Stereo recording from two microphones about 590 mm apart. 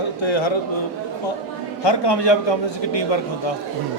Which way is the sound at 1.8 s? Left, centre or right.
Left.